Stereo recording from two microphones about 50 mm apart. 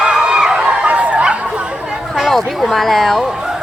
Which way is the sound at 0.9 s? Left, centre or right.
Right.